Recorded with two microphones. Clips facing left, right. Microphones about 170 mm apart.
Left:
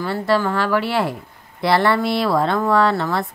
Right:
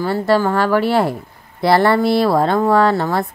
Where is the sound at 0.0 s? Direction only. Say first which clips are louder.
Right 4 dB; 40° right (ahead or behind).